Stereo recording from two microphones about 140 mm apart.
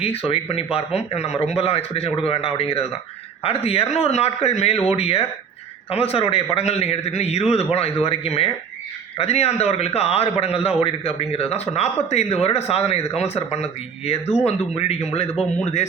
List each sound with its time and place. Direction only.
0.0 s a man's voice: 45° left (ahead or behind)